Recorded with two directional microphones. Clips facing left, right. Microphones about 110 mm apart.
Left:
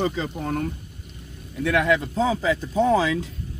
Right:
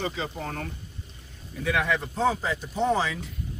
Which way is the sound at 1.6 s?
75° left (ahead or behind).